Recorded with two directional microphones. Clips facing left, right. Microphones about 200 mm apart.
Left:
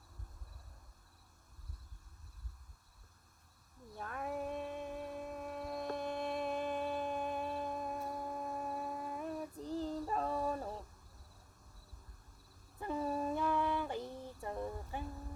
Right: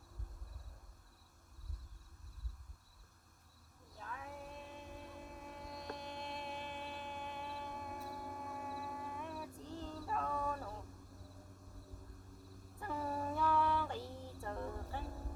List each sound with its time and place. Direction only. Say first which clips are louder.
3.9 s music: left 8 dB; 60° left (ahead or behind); by 10.8 s 35° left (ahead or behind)
12.8 s female singing: left 4 dB; 20° left (ahead or behind)